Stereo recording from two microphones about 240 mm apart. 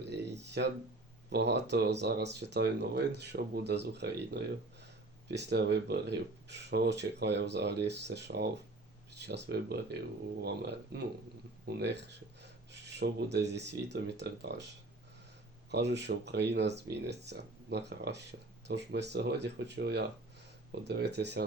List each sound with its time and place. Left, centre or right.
0.0 s a sound: right
1.3 s speech: right
15.7 s speech: right